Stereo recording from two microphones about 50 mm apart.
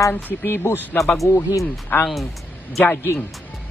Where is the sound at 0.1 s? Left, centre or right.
Left.